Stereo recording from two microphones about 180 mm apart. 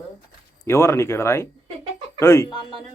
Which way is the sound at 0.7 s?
15° left (ahead or behind).